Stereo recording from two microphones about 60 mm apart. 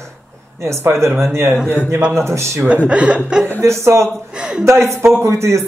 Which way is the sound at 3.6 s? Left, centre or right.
Right.